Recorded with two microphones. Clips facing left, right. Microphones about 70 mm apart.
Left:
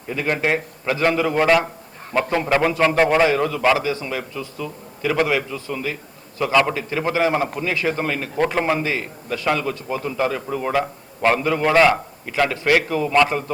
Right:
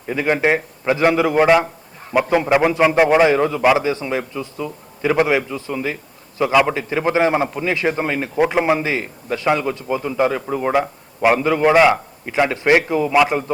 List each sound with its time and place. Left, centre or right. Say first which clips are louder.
0.1 s a man's voice: right 4 dB; centre
3.2 s a man's voice: right 3 dB; right
6.4 s a man's voice: right 3 dB; centre
6.7 s a man's voice: right 3 dB; right